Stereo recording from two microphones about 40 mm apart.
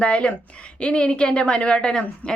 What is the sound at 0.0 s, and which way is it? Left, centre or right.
A woman's voice, left.